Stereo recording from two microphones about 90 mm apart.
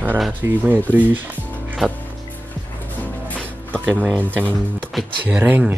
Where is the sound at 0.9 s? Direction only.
20° right (ahead or behind).